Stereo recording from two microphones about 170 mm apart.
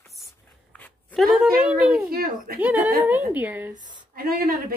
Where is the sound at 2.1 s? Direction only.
60° right (ahead or behind).